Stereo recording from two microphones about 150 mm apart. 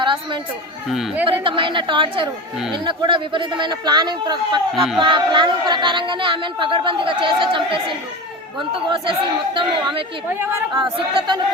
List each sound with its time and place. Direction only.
0.0 s chatter: 30° right (ahead or behind)
0.9 s speech: centre (ahead or behind)
1.3 s a woman's voice: 35° right (ahead or behind)
10.2 s a woman's voice: 15° right (ahead or behind)
10.8 s speech: 30° right (ahead or behind)